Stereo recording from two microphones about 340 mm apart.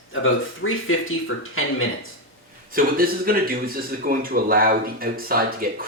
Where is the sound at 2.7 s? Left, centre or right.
Right.